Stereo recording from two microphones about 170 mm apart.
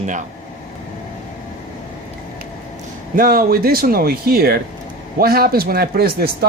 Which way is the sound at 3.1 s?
55° right (ahead or behind).